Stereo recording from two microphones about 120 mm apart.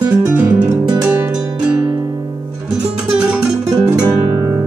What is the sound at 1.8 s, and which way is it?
Music, 35° right (ahead or behind).